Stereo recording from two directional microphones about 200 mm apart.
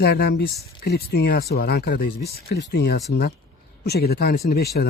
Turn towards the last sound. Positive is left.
turn(degrees=50)  # may be behind; listen again after turning